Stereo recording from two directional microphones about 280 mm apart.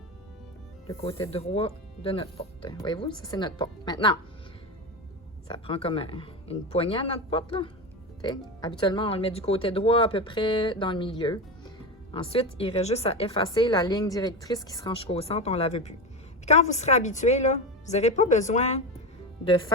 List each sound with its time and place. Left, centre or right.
0.9 s speech: centre
5.5 s a woman's voice: centre